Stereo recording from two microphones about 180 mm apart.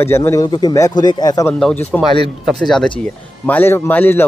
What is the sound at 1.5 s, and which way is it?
Speech, 5° left (ahead or behind).